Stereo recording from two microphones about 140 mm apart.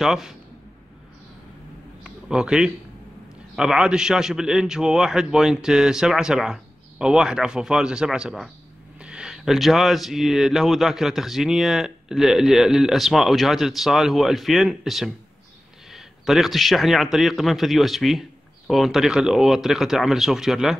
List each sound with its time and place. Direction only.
0.0 s speech: 5° right (ahead or behind)
2.0 s a sound: 5° right (ahead or behind)
3.5 s speech: 5° right (ahead or behind)